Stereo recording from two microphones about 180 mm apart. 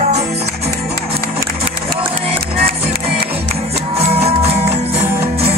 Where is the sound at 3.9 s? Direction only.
35° right (ahead or behind).